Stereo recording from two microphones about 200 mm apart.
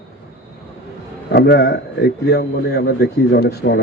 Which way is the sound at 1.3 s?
55° left (ahead or behind).